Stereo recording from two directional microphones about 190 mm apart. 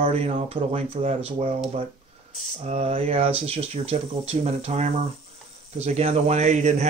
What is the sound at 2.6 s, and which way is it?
A man's voice, 35° right (ahead or behind).